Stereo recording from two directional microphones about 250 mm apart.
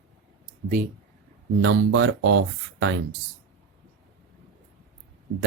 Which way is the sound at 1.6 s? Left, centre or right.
Right.